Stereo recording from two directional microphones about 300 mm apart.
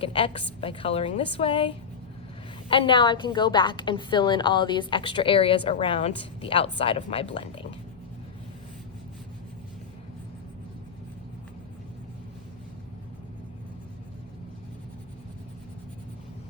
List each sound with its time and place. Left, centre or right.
0.0 s a woman's voice: centre